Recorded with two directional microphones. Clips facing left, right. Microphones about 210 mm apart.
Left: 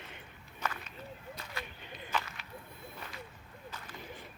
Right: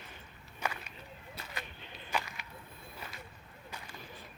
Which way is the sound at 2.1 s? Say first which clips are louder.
Even; 15° right (ahead or behind).